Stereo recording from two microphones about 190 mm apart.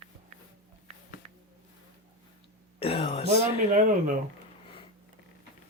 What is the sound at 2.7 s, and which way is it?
Throat clearing, 30° left (ahead or behind).